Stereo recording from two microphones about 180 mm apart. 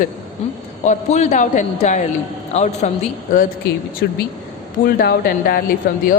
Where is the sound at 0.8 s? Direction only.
40° left (ahead or behind).